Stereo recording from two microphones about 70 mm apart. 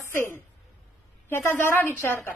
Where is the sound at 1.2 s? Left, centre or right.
Left.